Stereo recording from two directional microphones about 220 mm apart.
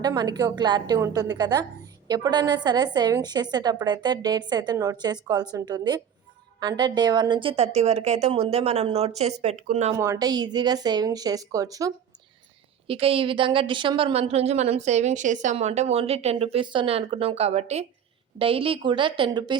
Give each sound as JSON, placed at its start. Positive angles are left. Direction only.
{"t": 0.0, "sound": "a woman's voice", "side_deg": -20}
{"t": 10.0, "sound": "speech", "side_deg": -15}
{"t": 12.9, "sound": "a woman's voice", "side_deg": -25}